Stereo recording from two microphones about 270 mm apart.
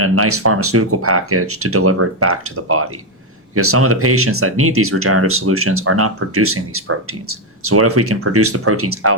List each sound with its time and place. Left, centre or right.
0.0 s speech: right